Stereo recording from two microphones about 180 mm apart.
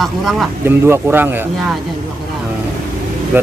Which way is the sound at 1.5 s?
Centre (ahead or behind).